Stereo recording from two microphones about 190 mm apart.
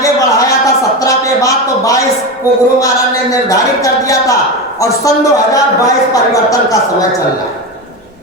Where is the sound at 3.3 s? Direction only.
15° left (ahead or behind).